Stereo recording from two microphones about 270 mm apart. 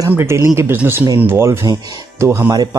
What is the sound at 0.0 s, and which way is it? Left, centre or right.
Speech, centre.